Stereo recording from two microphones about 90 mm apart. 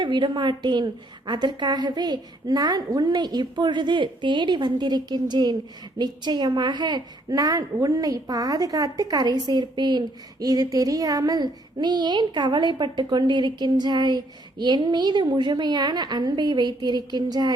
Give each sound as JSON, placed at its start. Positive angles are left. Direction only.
{"t": 0.0, "sound": "a woman's voice", "side_deg": -60}
{"t": 7.3, "sound": "a woman's voice", "side_deg": -45}
{"t": 10.4, "sound": "a woman's voice", "side_deg": -40}